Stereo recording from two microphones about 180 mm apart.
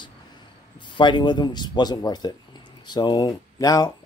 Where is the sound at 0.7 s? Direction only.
25° left (ahead or behind).